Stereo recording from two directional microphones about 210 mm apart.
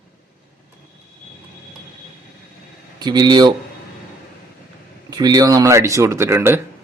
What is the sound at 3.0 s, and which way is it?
Speech, 20° right (ahead or behind).